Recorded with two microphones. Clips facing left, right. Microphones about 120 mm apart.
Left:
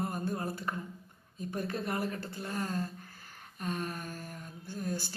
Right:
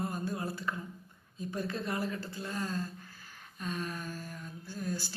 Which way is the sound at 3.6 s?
55° left (ahead or behind).